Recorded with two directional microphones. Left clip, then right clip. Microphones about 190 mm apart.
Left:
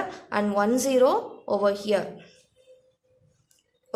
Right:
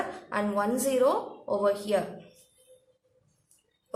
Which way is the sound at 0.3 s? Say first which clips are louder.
Left 5 dB; 45° left (ahead or behind).